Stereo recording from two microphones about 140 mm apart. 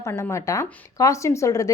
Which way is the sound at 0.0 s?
20° left (ahead or behind).